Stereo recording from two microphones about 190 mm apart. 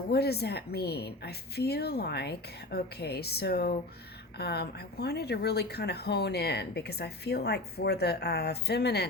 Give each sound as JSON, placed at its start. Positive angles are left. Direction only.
{"t": 0.1, "sound": "speech", "side_deg": 55}